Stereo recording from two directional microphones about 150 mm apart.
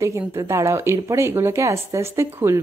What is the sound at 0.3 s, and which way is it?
Speech, 20° right (ahead or behind).